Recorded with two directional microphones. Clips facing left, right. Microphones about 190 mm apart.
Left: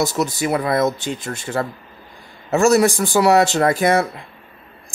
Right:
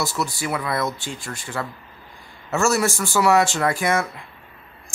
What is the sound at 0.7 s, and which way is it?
Speech, 20° left (ahead or behind).